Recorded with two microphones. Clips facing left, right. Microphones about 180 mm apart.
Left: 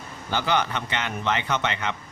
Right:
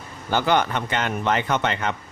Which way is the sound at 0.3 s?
50° right (ahead or behind).